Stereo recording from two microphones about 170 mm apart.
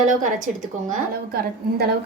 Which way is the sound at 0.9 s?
60° right (ahead or behind).